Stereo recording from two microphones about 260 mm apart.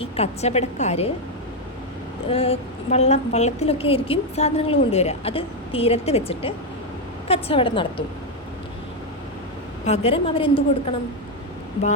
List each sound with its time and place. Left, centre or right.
0.0 s a woman's voice: left
2.3 s a woman's voice: left
9.8 s a woman's voice: left